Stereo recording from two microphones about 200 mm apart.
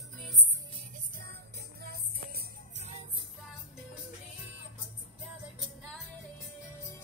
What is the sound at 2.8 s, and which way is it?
Music, 35° right (ahead or behind).